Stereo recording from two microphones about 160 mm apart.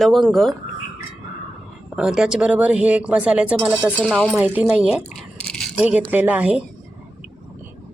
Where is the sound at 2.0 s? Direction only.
5° right (ahead or behind).